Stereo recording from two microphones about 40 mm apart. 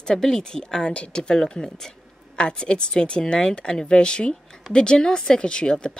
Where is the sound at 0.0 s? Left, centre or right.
Centre.